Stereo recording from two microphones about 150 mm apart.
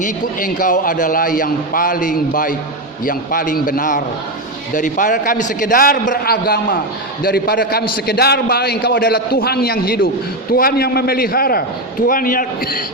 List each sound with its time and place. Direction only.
0.0 s a man's voice: 65° left (ahead or behind); by 11.6 s 90° left
12.0 s a man's voice: 70° left (ahead or behind)